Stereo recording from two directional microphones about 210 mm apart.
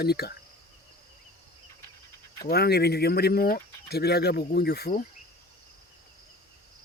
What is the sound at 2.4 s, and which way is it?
Speech, 50° left (ahead or behind).